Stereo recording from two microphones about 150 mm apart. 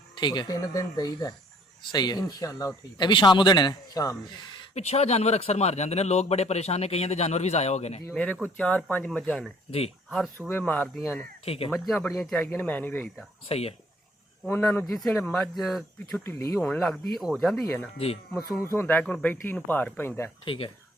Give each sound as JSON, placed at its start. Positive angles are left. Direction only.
{"t": 0.2, "sound": "a man's voice", "side_deg": 30}
{"t": 4.7, "sound": "a man's voice", "side_deg": 45}
{"t": 8.1, "sound": "speech", "side_deg": 10}
{"t": 10.5, "sound": "speech", "side_deg": 10}
{"t": 11.4, "sound": "speech", "side_deg": 40}
{"t": 11.7, "sound": "speech", "side_deg": 0}
{"t": 13.5, "sound": "speech", "side_deg": 40}
{"t": 14.4, "sound": "speech", "side_deg": 10}
{"t": 16.2, "sound": "a man's voice", "side_deg": 20}
{"t": 16.6, "sound": "speech", "side_deg": 0}
{"t": 17.9, "sound": "a man's voice", "side_deg": 40}
{"t": 18.3, "sound": "speech", "side_deg": 20}
{"t": 20.4, "sound": "speech", "side_deg": 35}